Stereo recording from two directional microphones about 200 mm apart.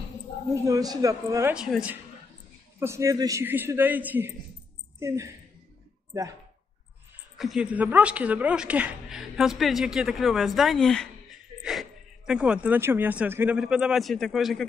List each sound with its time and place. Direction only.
0.7 s a man's voice: 15° right (ahead or behind)
1.5 s a woman's voice: 5° right (ahead or behind)
7.3 s a woman's voice: centre (ahead or behind)